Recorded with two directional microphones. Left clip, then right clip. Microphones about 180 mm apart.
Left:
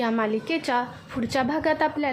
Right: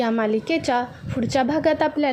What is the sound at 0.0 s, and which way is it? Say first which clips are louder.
A woman's voice: right 3 dB; 15° right (ahead or behind).